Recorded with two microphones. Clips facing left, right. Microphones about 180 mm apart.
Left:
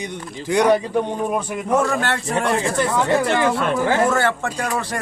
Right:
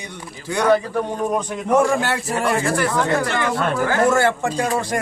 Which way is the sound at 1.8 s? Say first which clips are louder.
Right 3 dB; 10° right (ahead or behind).